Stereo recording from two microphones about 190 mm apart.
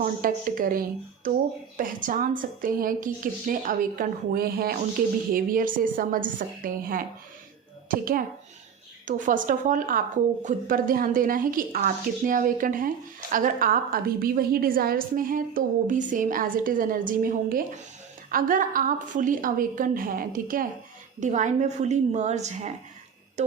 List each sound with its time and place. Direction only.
0.0 s a woman's voice: 50° right (ahead or behind)